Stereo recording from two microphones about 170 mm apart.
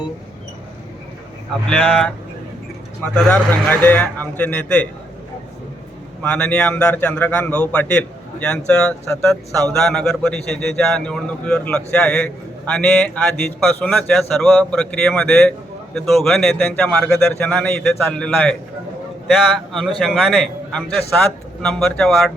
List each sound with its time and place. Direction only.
1.7 s a man's voice: centre (ahead or behind)
6.2 s a man's voice: 5° left (ahead or behind)
19.5 s a man's voice: centre (ahead or behind)